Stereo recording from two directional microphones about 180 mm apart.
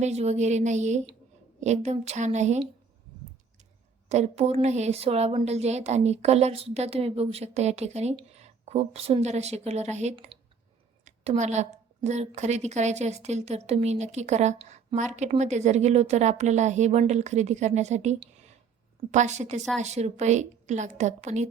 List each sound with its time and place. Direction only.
0.0 s a woman's voice: 40° right (ahead or behind)
4.1 s a woman's voice: 35° right (ahead or behind)